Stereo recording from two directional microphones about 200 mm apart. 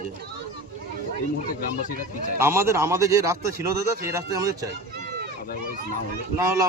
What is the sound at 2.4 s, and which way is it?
A man's voice, 15° right (ahead or behind).